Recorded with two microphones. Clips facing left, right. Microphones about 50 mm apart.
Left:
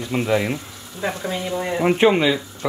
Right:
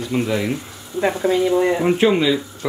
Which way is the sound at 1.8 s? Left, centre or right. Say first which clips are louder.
Even; centre.